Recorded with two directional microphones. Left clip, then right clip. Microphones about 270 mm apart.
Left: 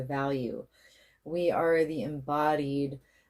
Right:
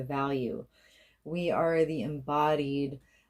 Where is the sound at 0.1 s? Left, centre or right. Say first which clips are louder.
Even; right.